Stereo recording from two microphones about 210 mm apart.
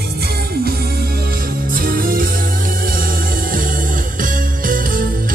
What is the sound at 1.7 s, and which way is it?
Music, 45° right (ahead or behind).